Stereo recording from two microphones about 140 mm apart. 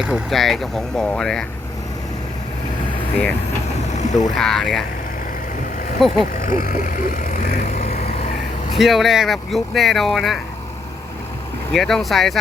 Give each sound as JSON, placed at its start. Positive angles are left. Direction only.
{"t": 0.0, "sound": "speech", "side_deg": 0}
{"t": 3.9, "sound": "vehicle", "side_deg": 60}
{"t": 4.4, "sound": "speech", "side_deg": 5}
{"t": 6.0, "sound": "speech", "side_deg": 0}
{"t": 6.3, "sound": "vehicle", "side_deg": 80}
{"t": 8.8, "sound": "speech", "side_deg": 0}
{"t": 11.7, "sound": "speech", "side_deg": 0}